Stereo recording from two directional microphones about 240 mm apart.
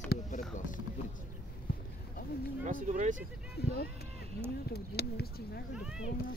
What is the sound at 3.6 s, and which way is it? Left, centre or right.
Speech, left.